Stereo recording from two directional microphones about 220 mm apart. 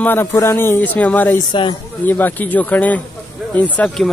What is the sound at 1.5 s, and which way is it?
Speech, 20° left (ahead or behind).